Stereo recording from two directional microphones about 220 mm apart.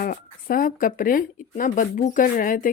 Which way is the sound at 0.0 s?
40° left (ahead or behind).